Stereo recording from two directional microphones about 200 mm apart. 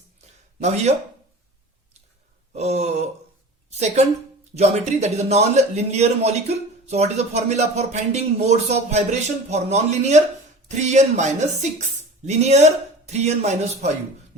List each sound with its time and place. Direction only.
0.6 s a man's voice: 35° right (ahead or behind)
2.5 s a man's voice: 35° right (ahead or behind)